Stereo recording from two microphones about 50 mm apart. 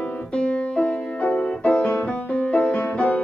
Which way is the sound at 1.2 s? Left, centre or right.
Left.